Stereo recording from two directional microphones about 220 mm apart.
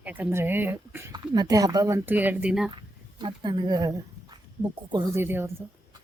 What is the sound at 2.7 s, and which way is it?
Speech, 20° right (ahead or behind).